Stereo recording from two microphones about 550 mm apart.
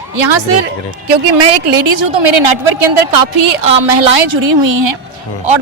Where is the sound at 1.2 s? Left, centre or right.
Right.